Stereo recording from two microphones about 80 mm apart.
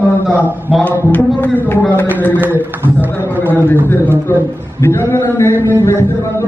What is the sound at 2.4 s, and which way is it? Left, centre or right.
A man's voice, right.